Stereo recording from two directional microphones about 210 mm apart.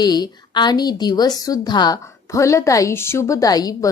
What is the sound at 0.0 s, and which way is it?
A woman's voice, 20° left (ahead or behind).